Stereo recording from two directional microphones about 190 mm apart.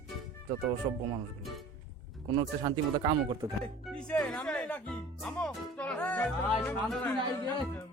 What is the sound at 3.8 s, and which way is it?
Speech, 5° left (ahead or behind).